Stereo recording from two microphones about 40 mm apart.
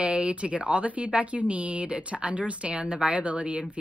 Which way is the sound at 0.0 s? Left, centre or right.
Right.